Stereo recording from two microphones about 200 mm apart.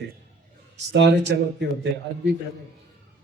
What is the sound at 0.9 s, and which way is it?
Speech, 60° right (ahead or behind).